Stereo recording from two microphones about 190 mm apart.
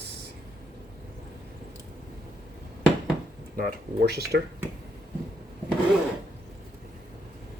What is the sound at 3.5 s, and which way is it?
Speech, 55° right (ahead or behind).